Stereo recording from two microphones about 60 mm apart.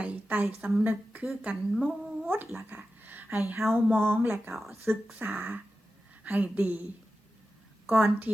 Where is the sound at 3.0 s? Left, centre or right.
Right.